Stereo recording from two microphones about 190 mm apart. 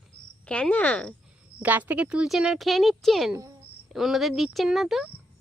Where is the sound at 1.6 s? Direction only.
10° right (ahead or behind).